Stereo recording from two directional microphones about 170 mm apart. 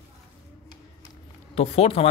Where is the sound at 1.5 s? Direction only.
35° left (ahead or behind).